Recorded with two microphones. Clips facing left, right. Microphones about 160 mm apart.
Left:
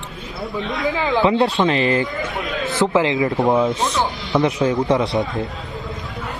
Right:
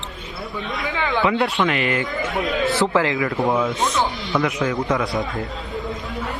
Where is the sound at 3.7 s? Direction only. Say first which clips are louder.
Left 1 dB; centre (ahead or behind).